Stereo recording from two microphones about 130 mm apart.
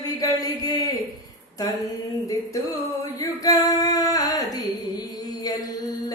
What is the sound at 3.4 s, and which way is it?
Speech, 30° left (ahead or behind).